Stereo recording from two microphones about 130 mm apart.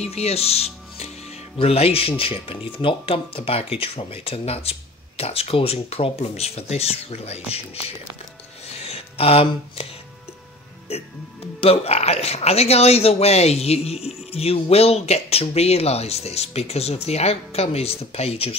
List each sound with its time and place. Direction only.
0.0 s speech: 55° left (ahead or behind)
8.7 s music: 50° left (ahead or behind)
11.6 s speech: 50° left (ahead or behind)